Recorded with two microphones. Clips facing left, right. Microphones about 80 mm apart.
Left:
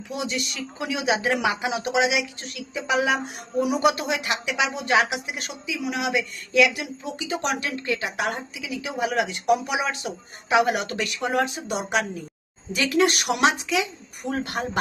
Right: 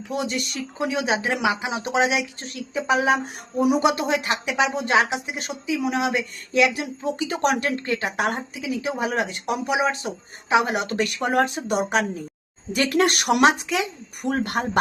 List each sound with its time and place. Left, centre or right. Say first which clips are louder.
0.1 s speech: right 3 dB; right
1.2 s speech: even; centre
4.0 s speech: right 3 dB; right
10.9 s speech: right 3 dB; right